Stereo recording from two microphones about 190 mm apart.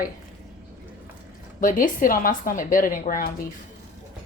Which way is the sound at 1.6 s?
45° left (ahead or behind).